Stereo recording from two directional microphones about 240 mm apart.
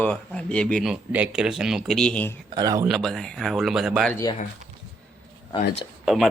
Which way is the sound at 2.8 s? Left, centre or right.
Centre.